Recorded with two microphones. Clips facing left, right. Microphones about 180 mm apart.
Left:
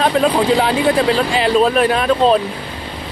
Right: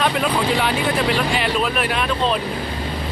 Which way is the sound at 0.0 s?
35° left (ahead or behind).